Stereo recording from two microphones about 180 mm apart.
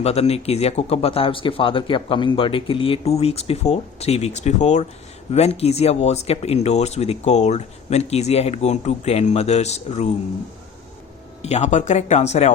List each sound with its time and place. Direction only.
0.0 s speech: 35° left (ahead or behind)
11.4 s speech: 40° left (ahead or behind)